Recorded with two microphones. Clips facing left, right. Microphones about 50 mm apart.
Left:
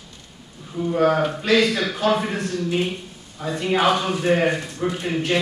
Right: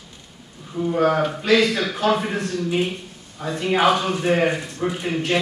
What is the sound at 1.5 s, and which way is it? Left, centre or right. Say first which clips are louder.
Speech: left 1 dB; centre.